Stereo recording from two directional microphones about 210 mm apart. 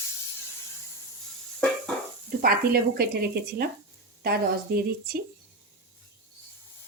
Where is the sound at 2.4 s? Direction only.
45° right (ahead or behind).